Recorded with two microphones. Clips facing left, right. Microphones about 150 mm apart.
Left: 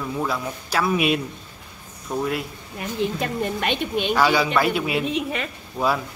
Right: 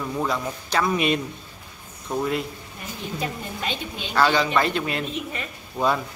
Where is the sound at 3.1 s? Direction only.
65° left (ahead or behind).